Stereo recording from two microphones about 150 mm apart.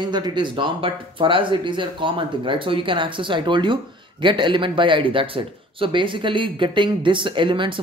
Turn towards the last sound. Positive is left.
turn(degrees=-35)  # may be behind; listen again after turning